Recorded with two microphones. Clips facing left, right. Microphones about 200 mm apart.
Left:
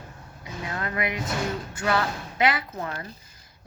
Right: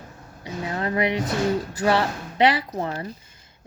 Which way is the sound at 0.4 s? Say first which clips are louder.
Right 5 dB; 30° right (ahead or behind).